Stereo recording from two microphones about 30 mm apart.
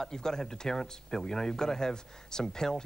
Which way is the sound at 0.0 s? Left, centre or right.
Left.